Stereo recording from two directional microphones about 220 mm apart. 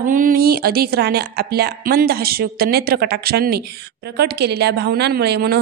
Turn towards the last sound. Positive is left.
turn(degrees=-50)  # may be behind; listen again after turning